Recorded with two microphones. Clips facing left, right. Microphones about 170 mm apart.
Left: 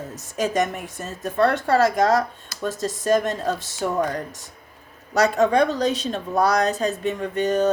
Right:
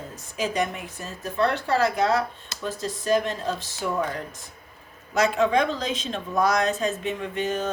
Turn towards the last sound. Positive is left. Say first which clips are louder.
# left 7 dB
turn(degrees=40)  # may be behind; listen again after turning